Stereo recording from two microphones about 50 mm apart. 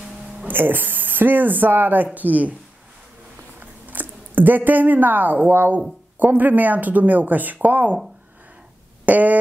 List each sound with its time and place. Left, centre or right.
0.5 s speech: right
3.5 s speech: right
9.0 s a sound: right